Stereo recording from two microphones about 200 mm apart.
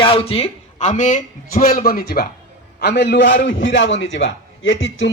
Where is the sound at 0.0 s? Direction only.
25° left (ahead or behind).